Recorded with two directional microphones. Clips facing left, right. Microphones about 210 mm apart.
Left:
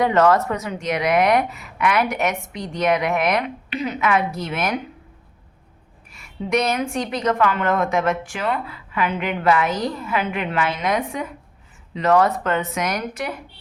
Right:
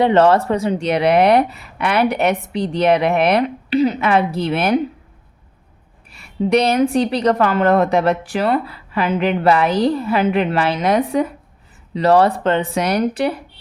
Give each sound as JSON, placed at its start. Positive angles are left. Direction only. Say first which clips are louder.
{"t": 0.0, "sound": "speech", "louder": "right 4 dB", "side_deg": -30}
{"t": 6.1, "sound": "speech", "louder": "right 7 dB", "side_deg": -35}